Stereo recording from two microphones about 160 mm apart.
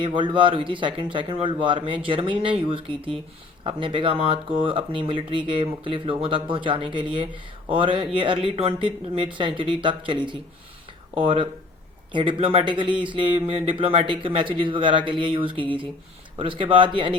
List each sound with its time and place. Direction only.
0.0 s speech: 30° right (ahead or behind)